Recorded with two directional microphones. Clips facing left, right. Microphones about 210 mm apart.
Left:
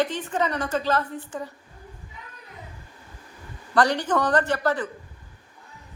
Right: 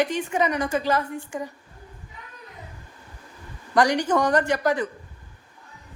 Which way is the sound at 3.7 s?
10° right (ahead or behind).